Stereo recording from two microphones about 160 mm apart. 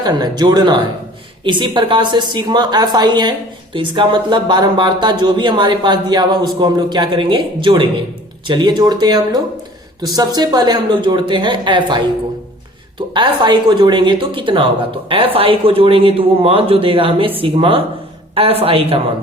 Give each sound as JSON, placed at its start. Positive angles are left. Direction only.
{"t": 0.0, "sound": "a woman's voice", "side_deg": -25}